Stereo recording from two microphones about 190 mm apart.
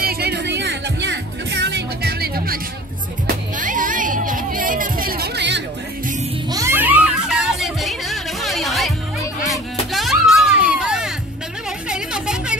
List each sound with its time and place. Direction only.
0.0 s music: 55° right (ahead or behind)
6.5 s music: 15° right (ahead or behind)